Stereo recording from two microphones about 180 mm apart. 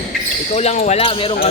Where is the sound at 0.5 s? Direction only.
40° left (ahead or behind).